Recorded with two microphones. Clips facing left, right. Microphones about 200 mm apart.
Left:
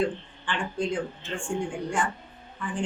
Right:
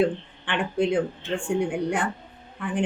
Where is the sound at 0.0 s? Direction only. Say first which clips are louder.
Right 4 dB; 60° right (ahead or behind).